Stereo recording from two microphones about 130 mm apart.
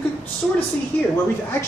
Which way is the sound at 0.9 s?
15° left (ahead or behind).